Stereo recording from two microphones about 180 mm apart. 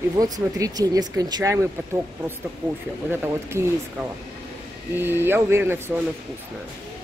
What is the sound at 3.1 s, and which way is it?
Speech, 10° right (ahead or behind).